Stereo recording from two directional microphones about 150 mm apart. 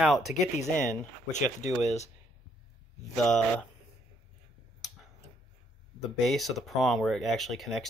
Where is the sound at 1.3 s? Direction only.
55° left (ahead or behind).